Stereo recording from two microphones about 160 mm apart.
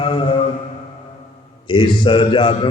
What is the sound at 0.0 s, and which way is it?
Music, 30° left (ahead or behind).